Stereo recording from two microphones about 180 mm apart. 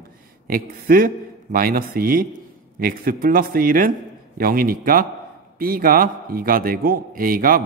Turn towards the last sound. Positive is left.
turn(degrees=-50)  # may be behind; listen again after turning